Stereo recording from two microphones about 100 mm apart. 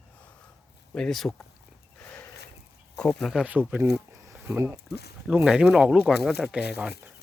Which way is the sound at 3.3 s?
15° right (ahead or behind).